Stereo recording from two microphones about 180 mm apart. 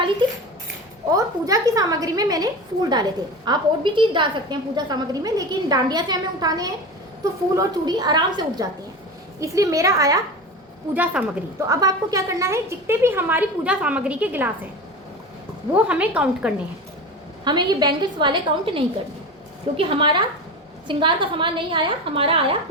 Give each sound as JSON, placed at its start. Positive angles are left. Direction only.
{"t": 1.1, "sound": "a woman's voice", "side_deg": -20}
{"t": 10.9, "sound": "a woman's voice", "side_deg": -10}
{"t": 11.7, "sound": "a woman's voice", "side_deg": -20}
{"t": 15.7, "sound": "a woman's voice", "side_deg": -5}
{"t": 17.4, "sound": "a woman's voice", "side_deg": -25}